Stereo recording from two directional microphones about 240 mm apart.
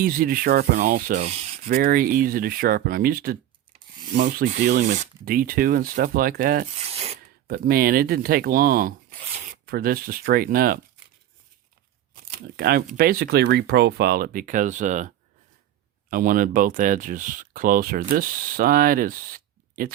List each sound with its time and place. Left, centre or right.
0.0 s speech: right
1.6 s speech: right
6.8 s filing: right
7.4 s speech: right
12.1 s speech: right